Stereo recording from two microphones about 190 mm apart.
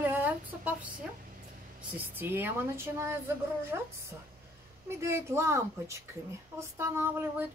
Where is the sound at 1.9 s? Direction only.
10° right (ahead or behind).